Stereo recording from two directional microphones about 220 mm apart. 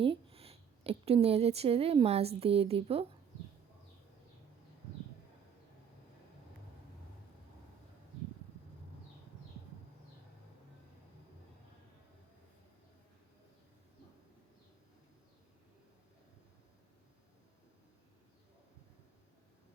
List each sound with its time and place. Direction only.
0.0 s speech: 25° right (ahead or behind)